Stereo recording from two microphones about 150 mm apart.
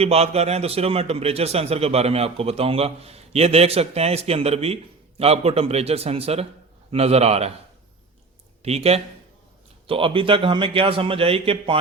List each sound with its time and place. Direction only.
0.0 s a man's voice: 45° right (ahead or behind)
8.6 s a man's voice: 45° right (ahead or behind)